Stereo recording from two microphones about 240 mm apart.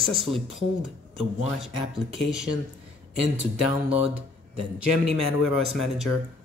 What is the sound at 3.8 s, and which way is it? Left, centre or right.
Speech, centre.